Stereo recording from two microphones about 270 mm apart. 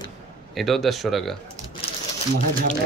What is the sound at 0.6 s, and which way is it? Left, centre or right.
Speech, centre.